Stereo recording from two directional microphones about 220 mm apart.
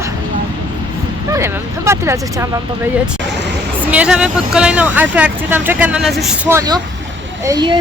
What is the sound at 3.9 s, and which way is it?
Speech, 5° right (ahead or behind).